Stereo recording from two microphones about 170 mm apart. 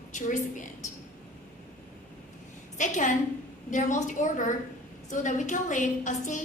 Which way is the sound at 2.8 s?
45° left (ahead or behind).